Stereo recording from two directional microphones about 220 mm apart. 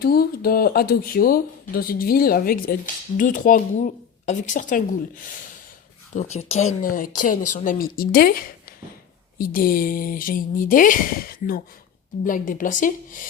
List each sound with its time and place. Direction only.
0.0 s speech: 45° left (ahead or behind)